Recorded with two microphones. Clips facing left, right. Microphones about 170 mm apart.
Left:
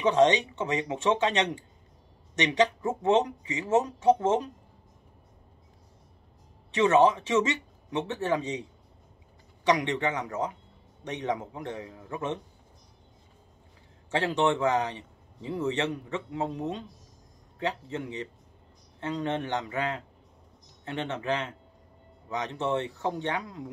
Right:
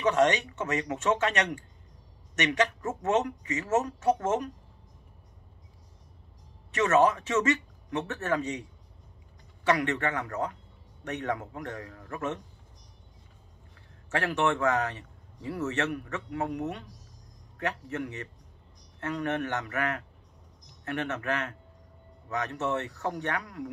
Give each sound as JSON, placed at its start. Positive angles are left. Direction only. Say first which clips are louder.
{"t": 0.0, "sound": "speech", "louder": "left 2 dB", "side_deg": 20}
{"t": 2.6, "sound": "speech", "louder": "left 3 dB", "side_deg": 15}
{"t": 3.2, "sound": "a man's voice", "louder": "left 2 dB", "side_deg": 30}
{"t": 7.3, "sound": "speech", "louder": "even", "side_deg": 20}
{"t": 9.7, "sound": "a man's voice", "louder": "left 1 dB", "side_deg": 15}
{"t": 14.1, "sound": "a man's voice", "louder": "left 2 dB", "side_deg": 25}